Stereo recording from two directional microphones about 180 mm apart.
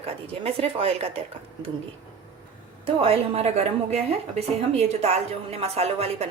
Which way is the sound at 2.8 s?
30° right (ahead or behind).